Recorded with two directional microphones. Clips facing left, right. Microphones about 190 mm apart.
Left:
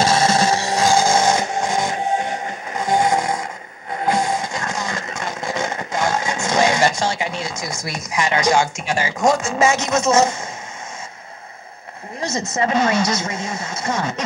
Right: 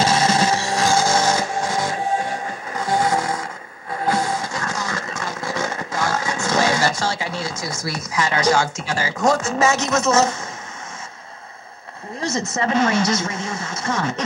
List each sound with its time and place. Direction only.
0.6 s music: 20° left (ahead or behind)
12.2 s a woman's voice: 15° left (ahead or behind)